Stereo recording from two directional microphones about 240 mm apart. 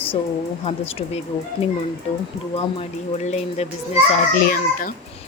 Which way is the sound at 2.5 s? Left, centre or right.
Left.